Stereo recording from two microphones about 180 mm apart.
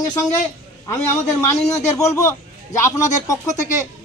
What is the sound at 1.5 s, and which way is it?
Speech, 40° left (ahead or behind).